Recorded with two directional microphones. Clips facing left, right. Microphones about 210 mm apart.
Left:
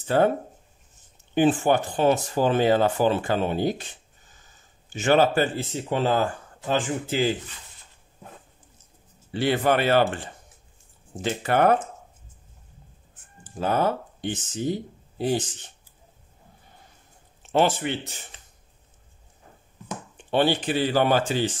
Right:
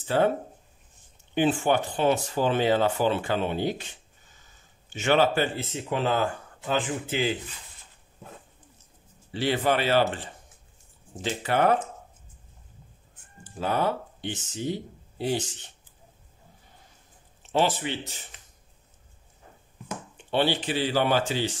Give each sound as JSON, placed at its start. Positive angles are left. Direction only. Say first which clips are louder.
{"t": 0.1, "sound": "speech", "louder": "left 3 dB", "side_deg": 50}
{"t": 1.3, "sound": "speech", "louder": "left 3 dB", "side_deg": 45}
{"t": 4.9, "sound": "speech", "louder": "left 3 dB", "side_deg": 45}
{"t": 9.3, "sound": "speech", "louder": "left 3 dB", "side_deg": 55}
{"t": 11.2, "sound": "speech", "louder": "left 3 dB", "side_deg": 50}
{"t": 13.4, "sound": "speech", "louder": "left 3 dB", "side_deg": 45}
{"t": 17.5, "sound": "speech", "louder": "left 3 dB", "side_deg": 55}
{"t": 20.2, "sound": "speech", "louder": "left 3 dB", "side_deg": 50}